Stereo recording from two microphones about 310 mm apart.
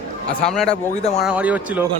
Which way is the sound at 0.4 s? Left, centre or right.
Centre.